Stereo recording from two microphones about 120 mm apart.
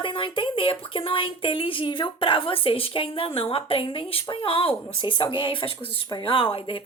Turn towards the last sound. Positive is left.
turn(degrees=50)  # may be behind; listen again after turning